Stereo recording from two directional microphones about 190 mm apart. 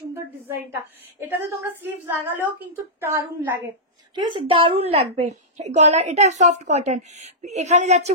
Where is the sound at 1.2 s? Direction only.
10° right (ahead or behind).